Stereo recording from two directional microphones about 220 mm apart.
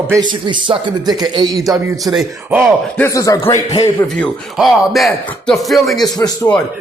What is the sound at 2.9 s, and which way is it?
Speech, 15° left (ahead or behind).